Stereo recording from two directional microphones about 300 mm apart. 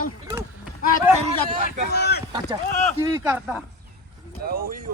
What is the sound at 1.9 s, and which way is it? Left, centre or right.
Speech, left.